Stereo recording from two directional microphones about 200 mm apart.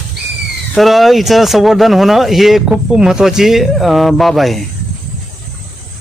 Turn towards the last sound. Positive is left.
turn(degrees=0)  # may be behind; listen again after turning